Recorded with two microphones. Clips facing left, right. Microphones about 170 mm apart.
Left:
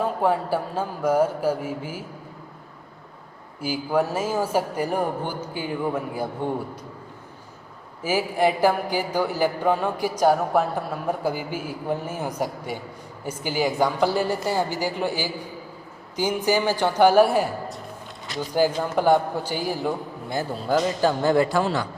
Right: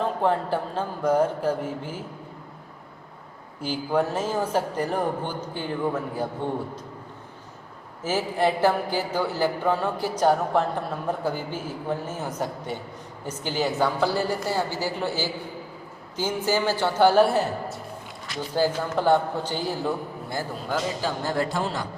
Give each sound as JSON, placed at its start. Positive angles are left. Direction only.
{"t": 0.0, "sound": "a man's voice", "side_deg": 10}
{"t": 3.6, "sound": "a man's voice", "side_deg": 10}
{"t": 8.0, "sound": "a man's voice", "side_deg": 10}
{"t": 18.5, "sound": "a man's voice", "side_deg": 15}
{"t": 20.7, "sound": "a man's voice", "side_deg": 40}